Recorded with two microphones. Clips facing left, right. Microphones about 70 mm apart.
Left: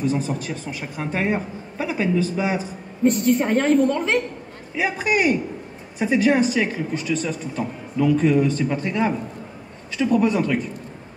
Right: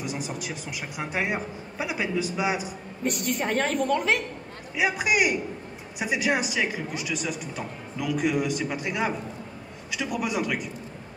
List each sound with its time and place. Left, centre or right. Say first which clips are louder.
0.0 s a man's voice: left 9 dB; centre
3.3 s a woman's voice: left 6 dB; centre
4.7 s a man's voice: left 2 dB; centre